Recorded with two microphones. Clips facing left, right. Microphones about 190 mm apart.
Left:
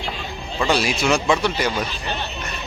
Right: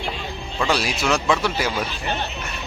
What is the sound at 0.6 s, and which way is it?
A man's voice, centre (ahead or behind).